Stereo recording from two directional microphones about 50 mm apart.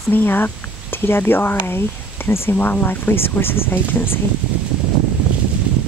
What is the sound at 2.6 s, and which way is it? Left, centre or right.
Speech, left.